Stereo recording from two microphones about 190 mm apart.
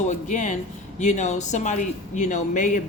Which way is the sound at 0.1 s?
40° left (ahead or behind).